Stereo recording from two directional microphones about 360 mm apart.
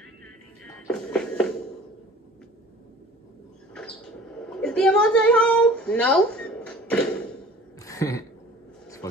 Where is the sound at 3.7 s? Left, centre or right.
Centre.